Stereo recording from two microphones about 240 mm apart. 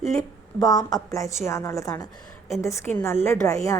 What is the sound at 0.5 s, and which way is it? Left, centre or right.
A woman's voice, centre.